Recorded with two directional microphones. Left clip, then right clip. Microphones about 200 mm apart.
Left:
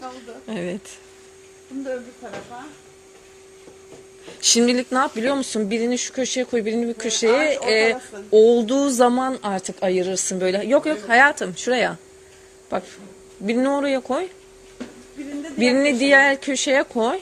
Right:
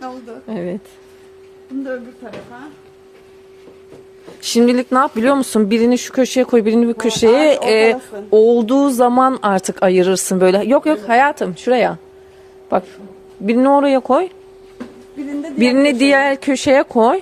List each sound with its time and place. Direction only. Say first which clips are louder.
0.4 s a sound: right 4 dB; 5° right (ahead or behind)
4.5 s speech: right 7 dB; 15° right (ahead or behind)
15.5 s speech: right 5 dB; 25° right (ahead or behind)